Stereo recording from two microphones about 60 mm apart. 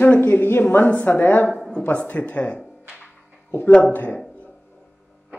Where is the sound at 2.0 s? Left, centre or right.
Left.